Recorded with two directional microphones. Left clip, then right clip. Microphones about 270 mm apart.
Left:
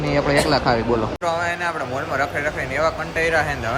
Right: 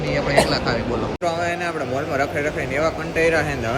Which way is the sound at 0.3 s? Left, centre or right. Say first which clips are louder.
Right 2 dB; right.